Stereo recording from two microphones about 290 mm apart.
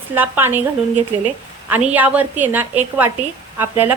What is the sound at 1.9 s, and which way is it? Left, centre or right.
A woman's voice, centre.